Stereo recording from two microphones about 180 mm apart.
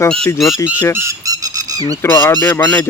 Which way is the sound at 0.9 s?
15° right (ahead or behind).